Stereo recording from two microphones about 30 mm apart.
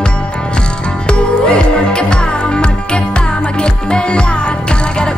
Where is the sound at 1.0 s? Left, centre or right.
Left.